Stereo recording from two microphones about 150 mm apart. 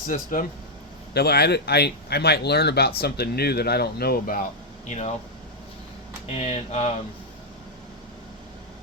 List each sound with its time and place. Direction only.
0.1 s speech: 65° left (ahead or behind)
1.1 s speech: 90° left; by 4.4 s 75° left (ahead or behind)
4.9 s speech: 50° left (ahead or behind)
6.3 s speech: 45° left (ahead or behind)